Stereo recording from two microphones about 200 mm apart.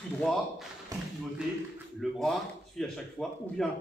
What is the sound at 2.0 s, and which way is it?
Speech, centre (ahead or behind).